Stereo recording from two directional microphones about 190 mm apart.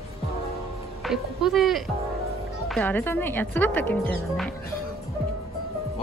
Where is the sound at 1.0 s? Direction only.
Centre (ahead or behind).